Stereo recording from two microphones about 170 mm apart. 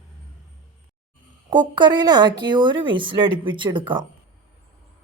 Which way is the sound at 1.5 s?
25° right (ahead or behind).